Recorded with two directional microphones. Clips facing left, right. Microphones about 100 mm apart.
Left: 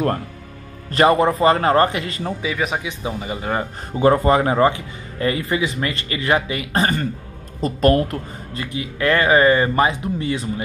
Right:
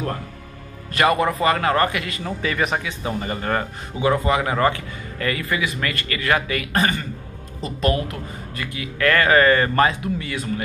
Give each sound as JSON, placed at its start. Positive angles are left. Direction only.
{"t": 0.9, "sound": "a man's voice", "side_deg": 30}
{"t": 2.4, "sound": "speech", "side_deg": 5}
{"t": 2.8, "sound": "speech", "side_deg": 15}
{"t": 3.9, "sound": "a man's voice", "side_deg": 40}
{"t": 4.6, "sound": "speech", "side_deg": 20}
{"t": 7.6, "sound": "speech", "side_deg": 45}
{"t": 8.5, "sound": "speech", "side_deg": 25}